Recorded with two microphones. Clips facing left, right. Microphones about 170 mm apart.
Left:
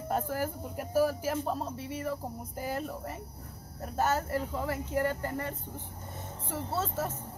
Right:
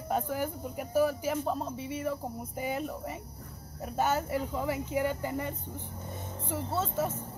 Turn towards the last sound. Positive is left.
turn(degrees=0)  # may be behind; listen again after turning